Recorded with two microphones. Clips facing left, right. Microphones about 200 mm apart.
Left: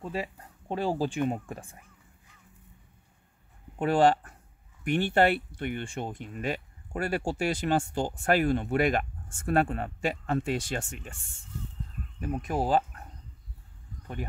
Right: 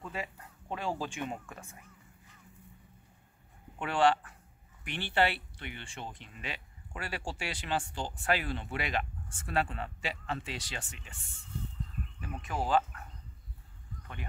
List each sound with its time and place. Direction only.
0.0 s speech: 35° left (ahead or behind)
3.7 s speech: 40° left (ahead or behind)
12.2 s speech: 40° left (ahead or behind)